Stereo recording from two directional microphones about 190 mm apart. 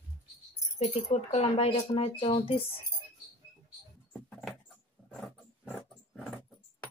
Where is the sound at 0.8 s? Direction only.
35° left (ahead or behind).